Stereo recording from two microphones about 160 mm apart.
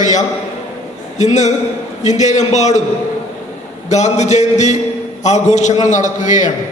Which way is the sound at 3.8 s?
45° left (ahead or behind).